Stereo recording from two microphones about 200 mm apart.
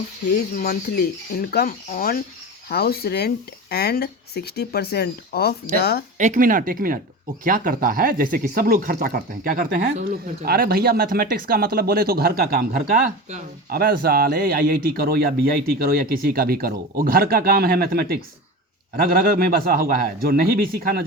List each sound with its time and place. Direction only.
0.3 s speech: 50° left (ahead or behind)
6.1 s speech: 40° right (ahead or behind)